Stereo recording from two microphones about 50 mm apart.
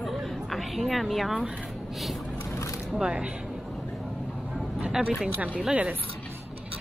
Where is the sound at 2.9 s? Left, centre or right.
Centre.